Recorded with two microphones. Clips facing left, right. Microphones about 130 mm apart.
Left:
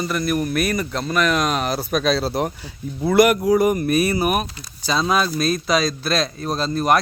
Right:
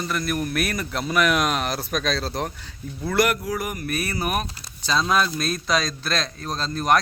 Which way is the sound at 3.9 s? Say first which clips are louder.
Left 7 dB; 15° left (ahead or behind).